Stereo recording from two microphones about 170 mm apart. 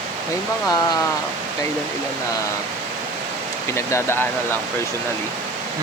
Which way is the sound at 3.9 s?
15° left (ahead or behind).